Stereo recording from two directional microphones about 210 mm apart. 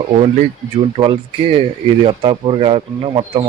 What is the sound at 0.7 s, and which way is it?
Speech, 25° right (ahead or behind).